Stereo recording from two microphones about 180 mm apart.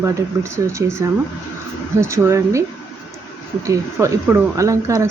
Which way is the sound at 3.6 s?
15° right (ahead or behind).